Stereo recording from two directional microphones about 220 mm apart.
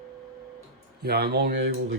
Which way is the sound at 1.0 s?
45° right (ahead or behind).